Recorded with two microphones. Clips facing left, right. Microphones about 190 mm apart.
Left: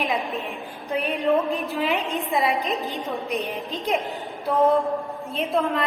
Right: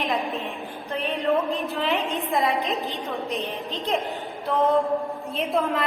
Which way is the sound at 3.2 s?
15° left (ahead or behind).